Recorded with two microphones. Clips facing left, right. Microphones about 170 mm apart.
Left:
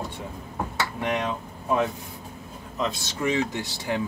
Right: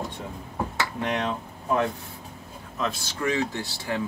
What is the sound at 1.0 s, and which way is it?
Speech, 10° left (ahead or behind).